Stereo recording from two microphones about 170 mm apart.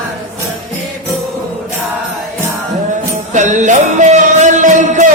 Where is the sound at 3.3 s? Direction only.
45° right (ahead or behind).